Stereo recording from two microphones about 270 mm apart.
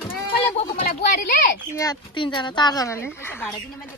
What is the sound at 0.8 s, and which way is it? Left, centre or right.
Speech, left.